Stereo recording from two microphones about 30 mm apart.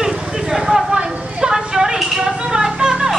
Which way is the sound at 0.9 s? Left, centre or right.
Right.